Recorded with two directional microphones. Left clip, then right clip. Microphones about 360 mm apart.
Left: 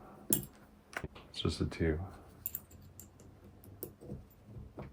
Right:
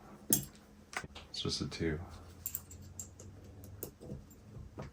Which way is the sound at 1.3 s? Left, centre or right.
Left.